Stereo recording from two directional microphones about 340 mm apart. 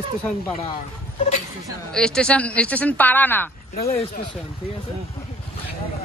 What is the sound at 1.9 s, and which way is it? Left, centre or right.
Speech, centre.